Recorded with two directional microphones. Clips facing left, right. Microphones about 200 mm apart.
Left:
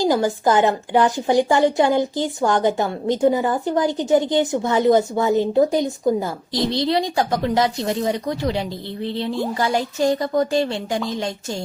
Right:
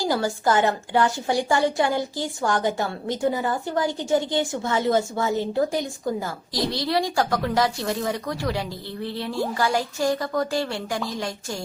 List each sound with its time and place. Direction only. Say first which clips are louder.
0.0 s a woman's voice: left 5 dB; 20° left (ahead or behind)